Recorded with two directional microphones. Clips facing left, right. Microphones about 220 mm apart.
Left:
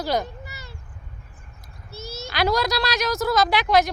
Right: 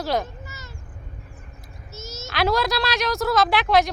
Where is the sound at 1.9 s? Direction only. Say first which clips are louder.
Left 2 dB; 35° left (ahead or behind).